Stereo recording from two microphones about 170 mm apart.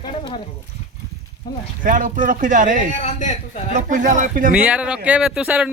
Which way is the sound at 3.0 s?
45° left (ahead or behind).